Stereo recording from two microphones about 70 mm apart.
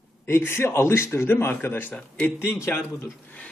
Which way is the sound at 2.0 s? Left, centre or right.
Centre.